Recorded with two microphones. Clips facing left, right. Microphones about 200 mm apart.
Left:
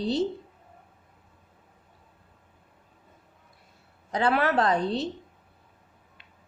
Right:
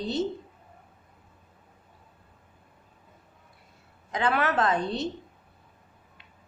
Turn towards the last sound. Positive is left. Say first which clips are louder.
# left 2 dB
turn(degrees=35)  # may be behind; listen again after turning